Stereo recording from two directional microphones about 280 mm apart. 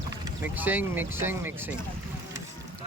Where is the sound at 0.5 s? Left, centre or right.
Centre.